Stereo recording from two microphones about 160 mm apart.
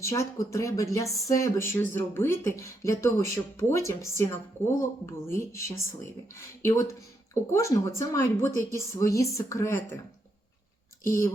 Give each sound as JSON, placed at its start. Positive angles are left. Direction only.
{"t": 0.0, "sound": "speech", "side_deg": 20}
{"t": 11.0, "sound": "speech", "side_deg": 15}